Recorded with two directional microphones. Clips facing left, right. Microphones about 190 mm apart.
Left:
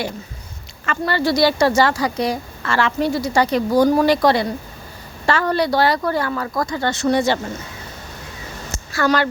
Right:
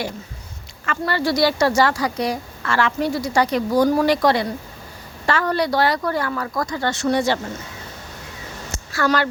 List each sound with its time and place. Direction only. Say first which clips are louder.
0.9 s a woman's voice: left 2 dB; 25° left (ahead or behind)
8.9 s speech: left 2 dB; 25° left (ahead or behind)